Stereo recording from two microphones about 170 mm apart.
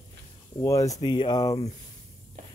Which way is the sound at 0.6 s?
20° left (ahead or behind).